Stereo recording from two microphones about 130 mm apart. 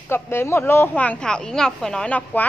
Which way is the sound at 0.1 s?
20° left (ahead or behind).